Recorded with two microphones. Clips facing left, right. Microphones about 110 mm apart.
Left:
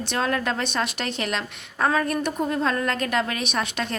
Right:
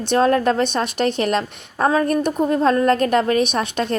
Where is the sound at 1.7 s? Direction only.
30° right (ahead or behind).